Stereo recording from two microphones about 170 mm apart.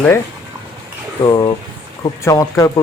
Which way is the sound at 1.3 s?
25° left (ahead or behind).